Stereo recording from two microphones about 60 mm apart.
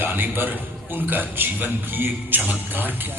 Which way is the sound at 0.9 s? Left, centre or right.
Right.